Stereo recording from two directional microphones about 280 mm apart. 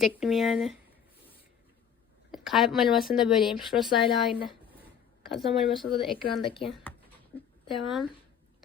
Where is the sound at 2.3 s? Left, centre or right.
Centre.